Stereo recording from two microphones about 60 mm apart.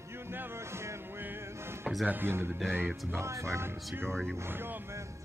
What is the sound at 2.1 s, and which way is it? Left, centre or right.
Speech, right.